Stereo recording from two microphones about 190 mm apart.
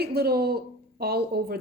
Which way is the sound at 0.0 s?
55° right (ahead or behind).